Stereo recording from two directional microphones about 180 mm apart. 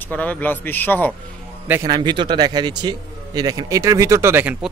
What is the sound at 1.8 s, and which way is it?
A man's voice, 25° right (ahead or behind).